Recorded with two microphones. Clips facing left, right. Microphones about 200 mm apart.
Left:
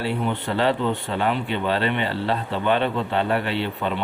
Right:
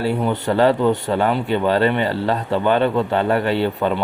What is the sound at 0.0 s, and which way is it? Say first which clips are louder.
A man's voice: right 5 dB; 40° right (ahead or behind).